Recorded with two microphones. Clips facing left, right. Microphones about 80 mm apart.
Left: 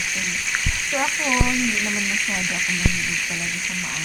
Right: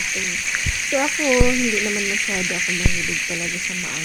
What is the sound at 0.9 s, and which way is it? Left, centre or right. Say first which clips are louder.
Frying: right 5 dB; centre.